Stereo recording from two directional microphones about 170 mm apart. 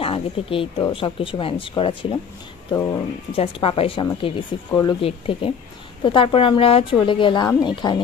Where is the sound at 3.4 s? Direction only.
35° left (ahead or behind).